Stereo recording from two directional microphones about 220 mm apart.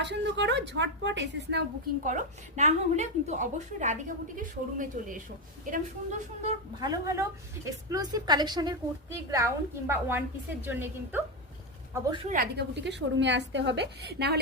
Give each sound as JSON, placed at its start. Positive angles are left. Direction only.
{"t": 0.0, "sound": "a woman's voice", "side_deg": -50}
{"t": 2.0, "sound": "a woman's voice", "side_deg": -30}
{"t": 6.7, "sound": "a woman's voice", "side_deg": -15}
{"t": 12.3, "sound": "a woman's voice", "side_deg": -45}